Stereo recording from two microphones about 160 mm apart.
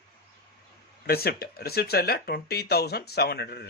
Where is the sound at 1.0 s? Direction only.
75° left (ahead or behind).